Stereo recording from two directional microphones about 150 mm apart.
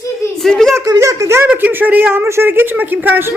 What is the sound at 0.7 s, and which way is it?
Speech, 20° right (ahead or behind).